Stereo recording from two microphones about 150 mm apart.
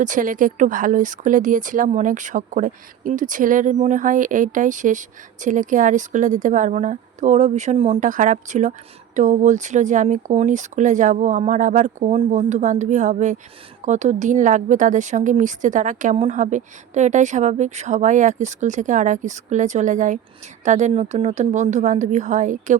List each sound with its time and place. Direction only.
0.0 s speech: 60° right (ahead or behind)